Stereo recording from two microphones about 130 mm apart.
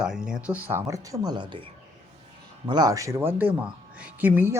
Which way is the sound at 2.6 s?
30° right (ahead or behind).